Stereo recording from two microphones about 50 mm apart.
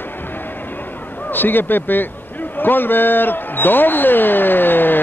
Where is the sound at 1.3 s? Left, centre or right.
Left.